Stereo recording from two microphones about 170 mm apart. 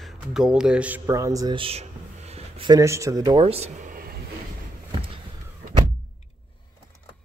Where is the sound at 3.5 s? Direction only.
40° right (ahead or behind); by 4.2 s 55° right (ahead or behind).